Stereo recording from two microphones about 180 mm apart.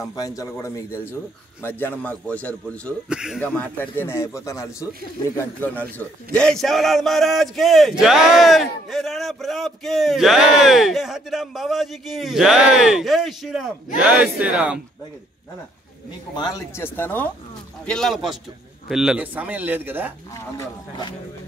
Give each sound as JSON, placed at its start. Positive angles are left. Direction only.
{"t": 0.1, "sound": "a man's voice", "side_deg": 20}
{"t": 3.1, "sound": "a man's voice", "side_deg": -5}
{"t": 3.3, "sound": "a man's voice", "side_deg": 10}
{"t": 16.3, "sound": "a man's voice", "side_deg": 20}
{"t": 20.3, "sound": "a man's voice", "side_deg": 15}